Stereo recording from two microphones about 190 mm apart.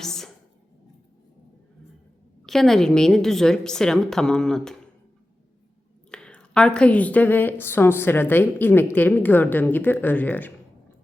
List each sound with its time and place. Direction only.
0.0 s a sound: centre (ahead or behind)
2.5 s a woman's voice: centre (ahead or behind)
6.1 s a woman's voice: 5° left (ahead or behind)